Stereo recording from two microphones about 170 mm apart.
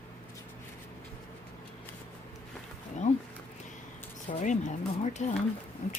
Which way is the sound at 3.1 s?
40° left (ahead or behind).